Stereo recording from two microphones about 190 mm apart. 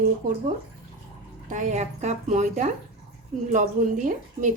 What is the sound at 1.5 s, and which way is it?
Speech, 40° right (ahead or behind).